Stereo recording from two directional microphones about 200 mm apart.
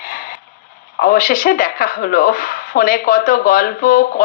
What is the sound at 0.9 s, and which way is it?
Speech, 45° left (ahead or behind).